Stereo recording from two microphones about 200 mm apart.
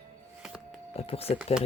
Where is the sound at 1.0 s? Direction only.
30° left (ahead or behind).